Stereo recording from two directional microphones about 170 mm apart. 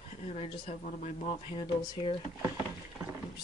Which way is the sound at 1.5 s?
25° left (ahead or behind).